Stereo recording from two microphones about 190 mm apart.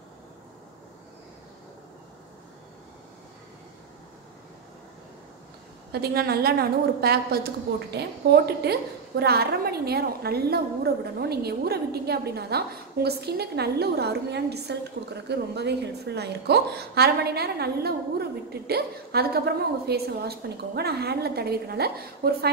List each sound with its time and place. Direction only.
5.9 s a woman's voice: 55° right (ahead or behind)